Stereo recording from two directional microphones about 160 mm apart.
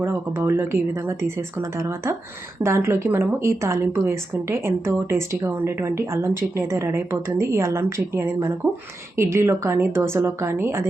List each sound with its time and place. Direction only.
0.0 s speech: 15° right (ahead or behind)